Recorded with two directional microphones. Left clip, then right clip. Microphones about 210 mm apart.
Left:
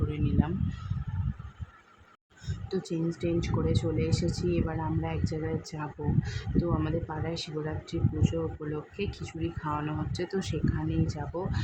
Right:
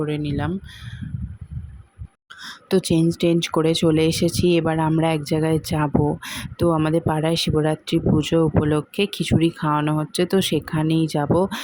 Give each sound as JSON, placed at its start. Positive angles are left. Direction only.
{"t": 0.1, "sound": "speech", "side_deg": -30}
{"t": 2.4, "sound": "speech", "side_deg": -35}